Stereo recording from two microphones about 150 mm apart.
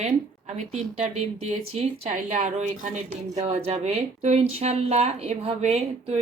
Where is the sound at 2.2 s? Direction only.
55° right (ahead or behind).